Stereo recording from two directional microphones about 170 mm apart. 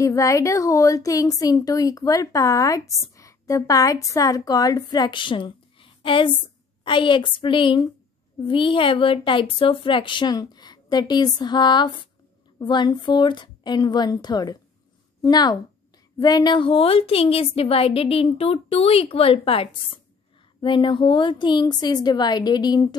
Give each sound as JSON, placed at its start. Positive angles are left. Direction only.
{"t": 0.0, "sound": "a woman's voice", "side_deg": 20}
{"t": 3.2, "sound": "a sound", "side_deg": 20}
{"t": 4.1, "sound": "a woman's voice", "side_deg": 20}